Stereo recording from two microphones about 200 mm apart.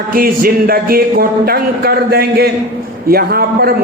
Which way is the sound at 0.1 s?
45° right (ahead or behind).